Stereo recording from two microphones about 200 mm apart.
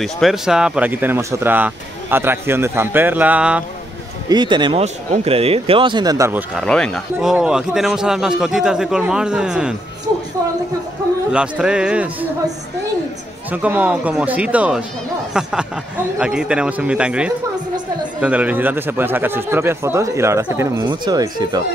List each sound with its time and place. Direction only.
0.0 s speech: centre (ahead or behind)
4.3 s speech: 20° right (ahead or behind)
6.5 s a man's voice: 5° left (ahead or behind)
11.3 s a man's voice: 5° right (ahead or behind)
13.5 s a man's voice: 5° right (ahead or behind)